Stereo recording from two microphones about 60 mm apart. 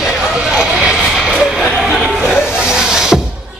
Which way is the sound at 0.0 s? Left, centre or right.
Centre.